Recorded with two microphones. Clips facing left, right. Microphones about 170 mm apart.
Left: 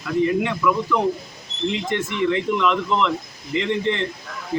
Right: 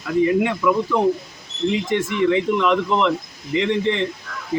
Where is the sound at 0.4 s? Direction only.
20° right (ahead or behind).